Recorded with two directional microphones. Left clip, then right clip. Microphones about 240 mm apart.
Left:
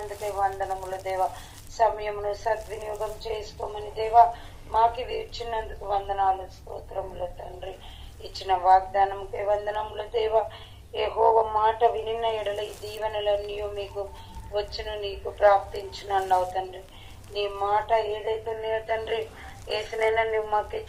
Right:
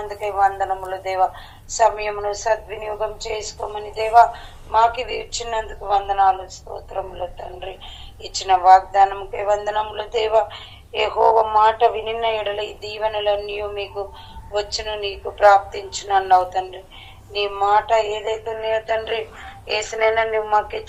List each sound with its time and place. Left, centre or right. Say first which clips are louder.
0.3 s speech: right 8 dB; right